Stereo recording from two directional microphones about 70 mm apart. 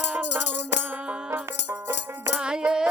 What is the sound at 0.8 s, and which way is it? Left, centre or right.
Music, right.